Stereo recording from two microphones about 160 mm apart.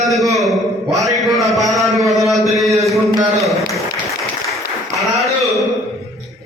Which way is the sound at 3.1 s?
20° right (ahead or behind).